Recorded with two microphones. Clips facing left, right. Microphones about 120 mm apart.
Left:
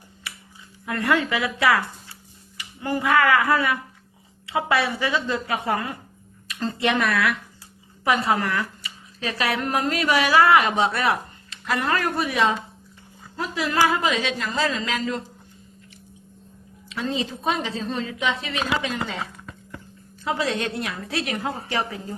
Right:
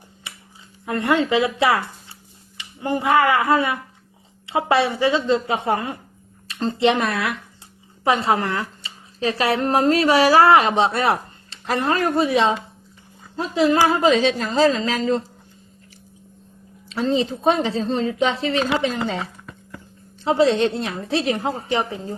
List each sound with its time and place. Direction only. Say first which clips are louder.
0.3 s finger snapping: left 1 dB; 20° right (ahead or behind)
0.9 s speech: right 3 dB; 25° right (ahead or behind)
16.9 s a woman's voice: right 6 dB; 30° right (ahead or behind)